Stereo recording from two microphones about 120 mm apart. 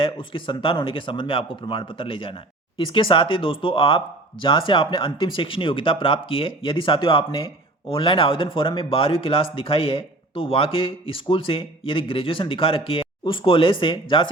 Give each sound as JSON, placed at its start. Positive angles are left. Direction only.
{"t": 0.0, "sound": "speech", "side_deg": 45}